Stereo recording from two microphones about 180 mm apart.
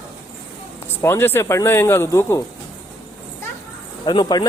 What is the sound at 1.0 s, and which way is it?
Speech, 15° left (ahead or behind).